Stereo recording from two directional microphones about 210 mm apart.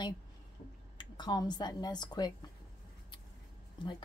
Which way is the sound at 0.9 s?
20° left (ahead or behind).